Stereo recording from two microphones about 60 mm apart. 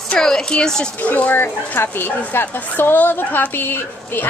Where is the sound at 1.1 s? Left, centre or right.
Left.